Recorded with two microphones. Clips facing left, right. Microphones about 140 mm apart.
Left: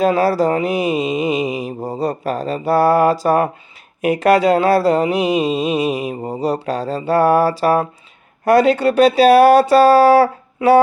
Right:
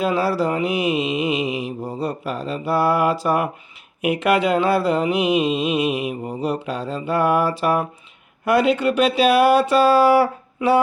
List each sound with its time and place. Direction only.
0.0 s mantra: 40° left (ahead or behind)